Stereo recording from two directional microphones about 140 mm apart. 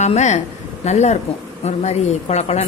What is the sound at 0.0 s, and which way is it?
A woman's voice, 55° left (ahead or behind).